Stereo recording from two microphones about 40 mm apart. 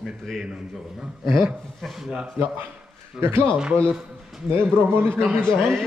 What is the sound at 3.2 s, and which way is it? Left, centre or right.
Speech, right.